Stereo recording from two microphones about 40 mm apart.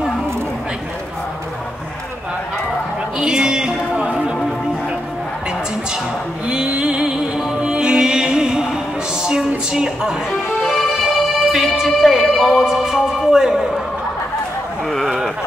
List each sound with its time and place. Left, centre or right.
3.2 s a sound: centre
6.4 s music: right
9.7 s a woman's voice: centre
10.3 s music: centre